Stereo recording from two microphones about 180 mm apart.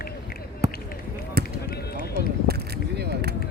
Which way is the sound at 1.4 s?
60° right (ahead or behind).